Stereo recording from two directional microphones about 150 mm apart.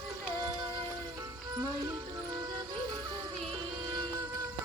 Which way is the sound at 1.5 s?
20° right (ahead or behind).